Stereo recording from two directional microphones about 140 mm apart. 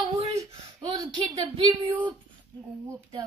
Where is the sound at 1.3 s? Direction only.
40° right (ahead or behind).